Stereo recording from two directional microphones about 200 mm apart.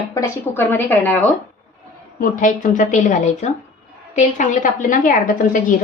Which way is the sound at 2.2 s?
40° left (ahead or behind).